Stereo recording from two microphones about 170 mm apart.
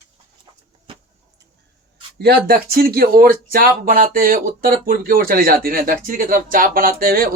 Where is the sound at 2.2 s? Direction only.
70° right (ahead or behind).